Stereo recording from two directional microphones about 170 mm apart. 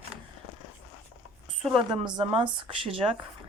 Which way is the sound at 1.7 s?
25° right (ahead or behind).